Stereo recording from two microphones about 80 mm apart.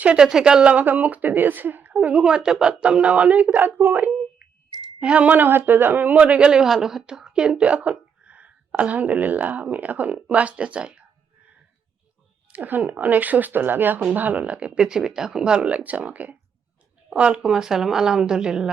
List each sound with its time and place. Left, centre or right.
0.0 s speech: centre
4.9 s speech: centre
12.5 s speech: right